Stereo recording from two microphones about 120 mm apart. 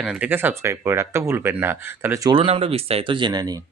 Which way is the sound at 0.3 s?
20° right (ahead or behind).